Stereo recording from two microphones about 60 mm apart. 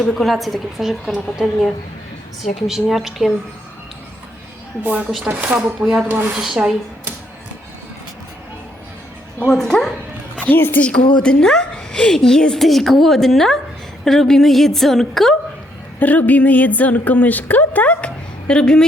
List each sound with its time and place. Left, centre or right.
0.0 s a woman's voice: centre
2.6 s a woman's voice: centre
5.3 s speech: right
5.8 s speech: centre
6.1 s speech: right
6.3 s speech: centre
9.5 s a woman's voice: centre
10.4 s a woman's voice: left
10.8 s a woman's voice: centre
16.0 s a woman's voice: left